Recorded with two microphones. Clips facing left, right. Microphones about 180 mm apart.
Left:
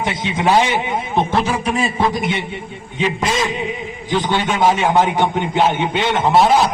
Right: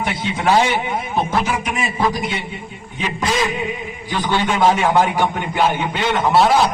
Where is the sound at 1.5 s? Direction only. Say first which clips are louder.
Left 3 dB; 30° left (ahead or behind).